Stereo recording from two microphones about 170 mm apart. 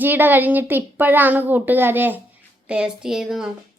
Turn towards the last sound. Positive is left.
turn(degrees=-5)  # may be behind; listen again after turning